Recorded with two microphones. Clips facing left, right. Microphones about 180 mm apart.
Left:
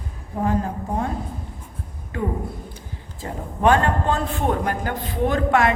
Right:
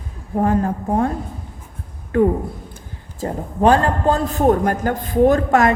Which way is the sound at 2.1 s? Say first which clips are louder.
Right 11 dB; 55° right (ahead or behind).